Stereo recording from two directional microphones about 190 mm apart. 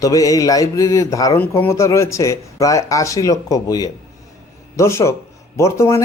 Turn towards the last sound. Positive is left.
turn(degrees=15)  # may be behind; listen again after turning